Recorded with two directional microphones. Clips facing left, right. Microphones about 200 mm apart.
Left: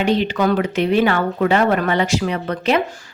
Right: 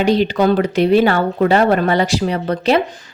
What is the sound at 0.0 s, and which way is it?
A woman's voice, 35° right (ahead or behind).